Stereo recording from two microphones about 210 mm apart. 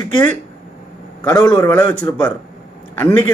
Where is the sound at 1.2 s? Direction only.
10° left (ahead or behind).